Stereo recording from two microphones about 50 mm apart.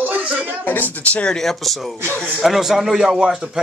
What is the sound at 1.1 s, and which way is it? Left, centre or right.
Speech, left.